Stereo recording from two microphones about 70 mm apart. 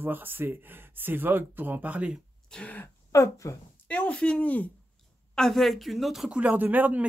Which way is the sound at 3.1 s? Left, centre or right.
Left.